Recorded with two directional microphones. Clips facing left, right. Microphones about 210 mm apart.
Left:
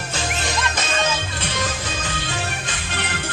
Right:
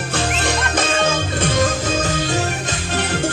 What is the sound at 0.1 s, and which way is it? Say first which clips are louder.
Music: right 5 dB; 55° right (ahead or behind).